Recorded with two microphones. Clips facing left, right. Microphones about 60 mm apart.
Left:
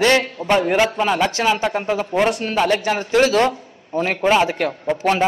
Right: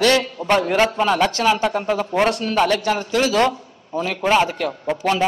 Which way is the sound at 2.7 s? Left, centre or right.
Left.